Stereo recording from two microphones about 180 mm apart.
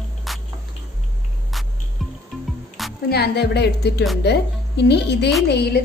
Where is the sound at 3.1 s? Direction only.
65° left (ahead or behind).